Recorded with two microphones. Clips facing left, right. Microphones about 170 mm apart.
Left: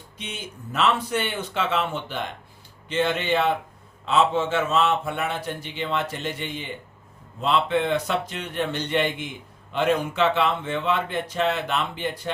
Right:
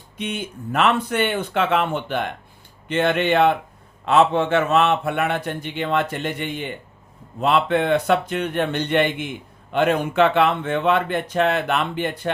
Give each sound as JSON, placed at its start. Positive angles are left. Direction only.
{"t": 0.2, "sound": "a man's voice", "side_deg": -60}